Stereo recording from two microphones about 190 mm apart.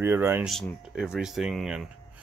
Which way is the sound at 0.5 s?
Centre (ahead or behind).